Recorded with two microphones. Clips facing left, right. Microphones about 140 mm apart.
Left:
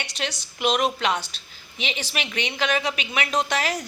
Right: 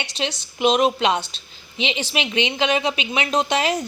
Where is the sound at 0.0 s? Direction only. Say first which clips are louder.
Right 4 dB; 25° right (ahead or behind).